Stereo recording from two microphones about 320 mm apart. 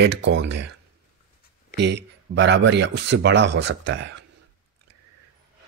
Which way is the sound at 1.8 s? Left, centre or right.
Right.